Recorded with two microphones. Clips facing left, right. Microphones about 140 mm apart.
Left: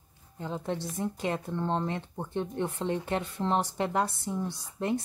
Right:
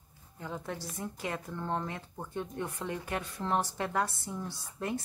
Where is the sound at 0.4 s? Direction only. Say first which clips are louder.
Left 5 dB; 25° left (ahead or behind).